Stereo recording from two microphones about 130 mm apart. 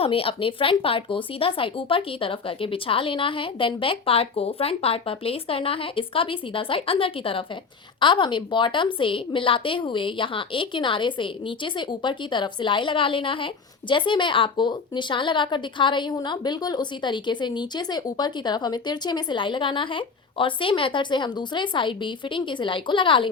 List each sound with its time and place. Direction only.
0.0 s a woman's voice: 45° left (ahead or behind)